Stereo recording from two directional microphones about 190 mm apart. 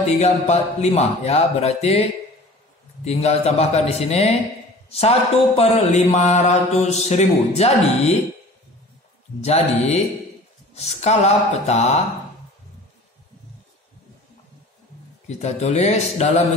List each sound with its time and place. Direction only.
0.2 s mantra: 35° left (ahead or behind)
3.1 s mantra: 35° left (ahead or behind)
4.8 s a sound: 35° left (ahead or behind)
5.6 s mantra: 35° left (ahead or behind)
9.4 s mantra: 35° left (ahead or behind)
15.2 s mantra: 35° left (ahead or behind)